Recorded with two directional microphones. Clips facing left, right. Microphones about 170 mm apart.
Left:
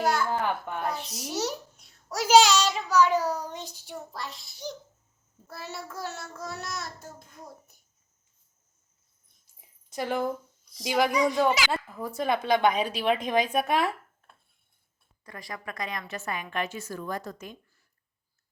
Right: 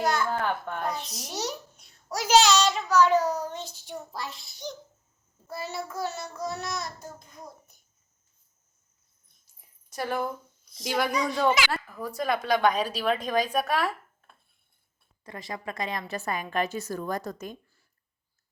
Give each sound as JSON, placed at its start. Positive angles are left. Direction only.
{"t": 0.0, "sound": "a child's voice", "side_deg": 5}
{"t": 1.4, "sound": "a child's voice", "side_deg": 0}
{"t": 4.1, "sound": "child singing", "side_deg": 0}
{"t": 9.6, "sound": "a sound", "side_deg": 20}
{"t": 10.8, "sound": "a child's voice", "side_deg": 15}
{"t": 15.2, "sound": "a woman's voice", "side_deg": -25}